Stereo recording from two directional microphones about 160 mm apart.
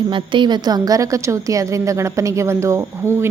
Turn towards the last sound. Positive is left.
turn(degrees=-15)  # may be behind; listen again after turning